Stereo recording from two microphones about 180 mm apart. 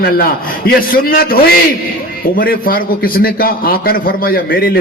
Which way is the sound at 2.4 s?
55° left (ahead or behind).